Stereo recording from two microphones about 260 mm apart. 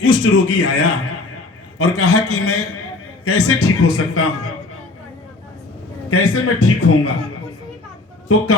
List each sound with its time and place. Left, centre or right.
0.0 s a man's voice: left
6.1 s a man's voice: left
8.3 s a man's voice: left